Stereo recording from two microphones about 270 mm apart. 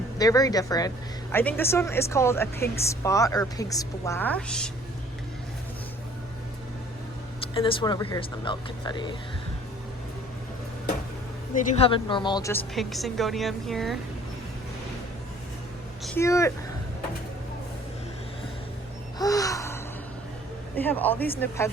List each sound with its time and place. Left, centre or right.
0.2 s a woman's voice: centre
7.4 s a woman's voice: centre
11.5 s a woman's voice: centre
16.0 s speech: centre
19.2 s gasp: centre
20.7 s a woman's voice: centre